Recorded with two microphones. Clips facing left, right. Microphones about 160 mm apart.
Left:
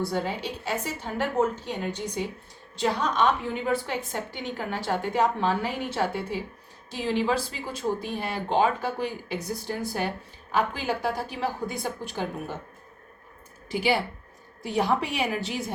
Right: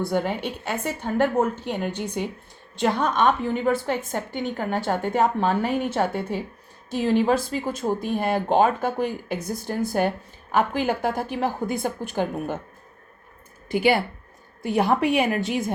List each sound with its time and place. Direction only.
0.0 s a woman's voice: 55° right (ahead or behind)
13.7 s a woman's voice: 55° right (ahead or behind)